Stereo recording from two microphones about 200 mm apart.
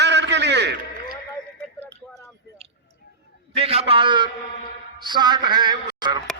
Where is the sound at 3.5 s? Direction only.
30° right (ahead or behind).